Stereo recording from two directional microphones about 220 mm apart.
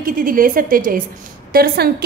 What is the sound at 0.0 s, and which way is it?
A woman's voice, 40° right (ahead or behind).